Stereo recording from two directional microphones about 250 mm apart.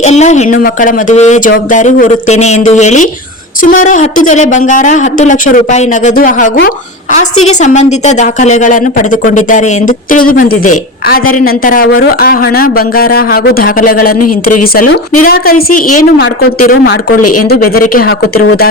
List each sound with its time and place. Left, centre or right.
0.0 s speech: left
15.2 s speech: left